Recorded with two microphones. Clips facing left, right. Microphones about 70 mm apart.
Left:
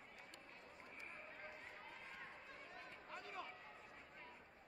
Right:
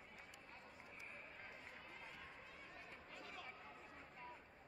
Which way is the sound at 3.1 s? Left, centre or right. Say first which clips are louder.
Left 5 dB; left.